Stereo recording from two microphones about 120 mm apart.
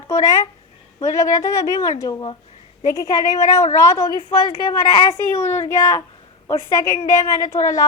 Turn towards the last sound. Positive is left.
turn(degrees=25)  # may be behind; listen again after turning